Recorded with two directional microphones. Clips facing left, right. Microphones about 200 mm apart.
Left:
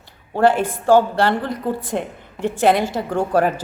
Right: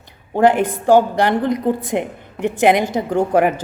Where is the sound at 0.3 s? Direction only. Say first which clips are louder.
Right 2 dB; 15° right (ahead or behind).